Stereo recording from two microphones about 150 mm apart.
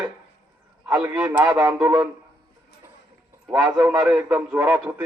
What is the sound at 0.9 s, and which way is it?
A man's voice, 10° right (ahead or behind).